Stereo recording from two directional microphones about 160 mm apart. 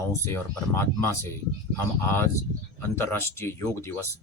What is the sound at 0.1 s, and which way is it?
Speech, 15° left (ahead or behind).